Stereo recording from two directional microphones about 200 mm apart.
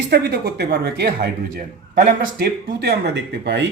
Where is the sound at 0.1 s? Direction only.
55° right (ahead or behind).